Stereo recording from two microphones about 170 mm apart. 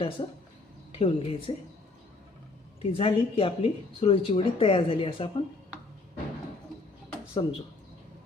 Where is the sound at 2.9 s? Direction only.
30° left (ahead or behind).